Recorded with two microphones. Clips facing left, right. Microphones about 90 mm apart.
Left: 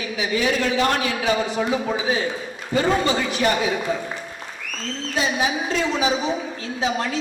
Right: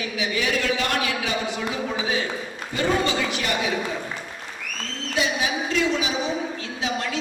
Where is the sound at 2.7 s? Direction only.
35° left (ahead or behind).